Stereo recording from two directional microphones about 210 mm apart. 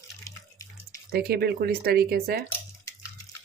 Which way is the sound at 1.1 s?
50° right (ahead or behind).